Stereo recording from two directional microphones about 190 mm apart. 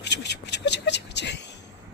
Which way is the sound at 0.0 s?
65° left (ahead or behind).